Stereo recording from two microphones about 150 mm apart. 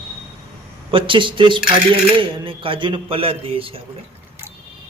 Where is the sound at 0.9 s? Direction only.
35° right (ahead or behind).